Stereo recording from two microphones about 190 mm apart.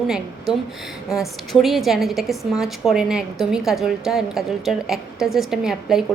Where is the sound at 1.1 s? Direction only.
Centre (ahead or behind).